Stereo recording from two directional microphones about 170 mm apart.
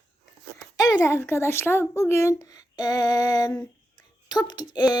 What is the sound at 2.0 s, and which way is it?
Child singing, 15° left (ahead or behind).